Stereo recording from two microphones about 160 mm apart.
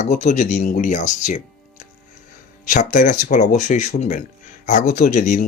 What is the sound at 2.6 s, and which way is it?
Speech, 50° left (ahead or behind).